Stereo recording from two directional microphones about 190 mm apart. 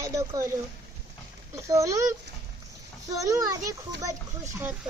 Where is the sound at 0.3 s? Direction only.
15° right (ahead or behind).